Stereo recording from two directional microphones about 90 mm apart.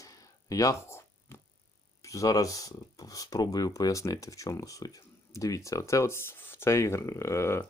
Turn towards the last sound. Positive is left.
turn(degrees=30)  # may be behind; listen again after turning